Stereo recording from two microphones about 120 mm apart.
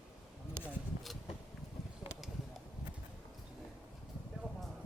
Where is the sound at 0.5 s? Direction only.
Centre (ahead or behind).